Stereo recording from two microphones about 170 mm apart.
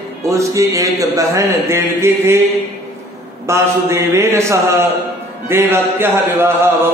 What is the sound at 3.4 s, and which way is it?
Speech, 15° right (ahead or behind).